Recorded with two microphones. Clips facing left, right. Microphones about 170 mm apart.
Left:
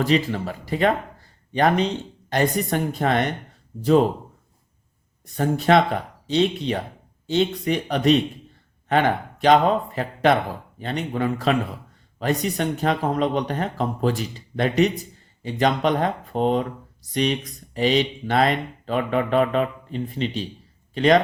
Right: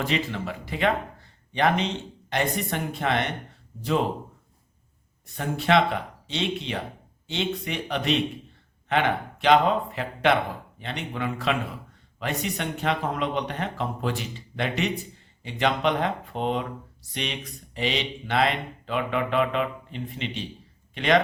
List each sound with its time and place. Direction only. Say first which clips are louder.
0.0 s speech: left 6 dB; 40° left (ahead or behind)
5.2 s speech: left 7 dB; 40° left (ahead or behind)
17.7 s speech: left 8 dB; 40° left (ahead or behind)